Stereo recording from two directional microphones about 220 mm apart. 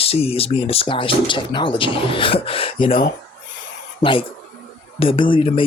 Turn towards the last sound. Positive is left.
turn(degrees=25)  # may be behind; listen again after turning